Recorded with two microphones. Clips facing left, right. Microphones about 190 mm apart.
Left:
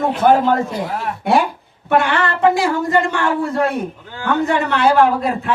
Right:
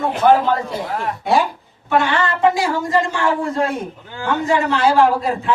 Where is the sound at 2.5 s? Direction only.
60° left (ahead or behind).